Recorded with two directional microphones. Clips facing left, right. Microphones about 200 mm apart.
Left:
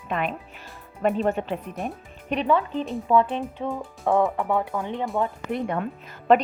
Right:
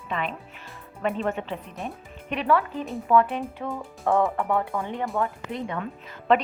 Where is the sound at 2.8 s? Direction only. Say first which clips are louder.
Left 3 dB; centre (ahead or behind).